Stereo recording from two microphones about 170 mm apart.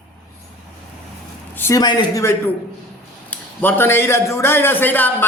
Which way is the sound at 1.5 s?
15° left (ahead or behind).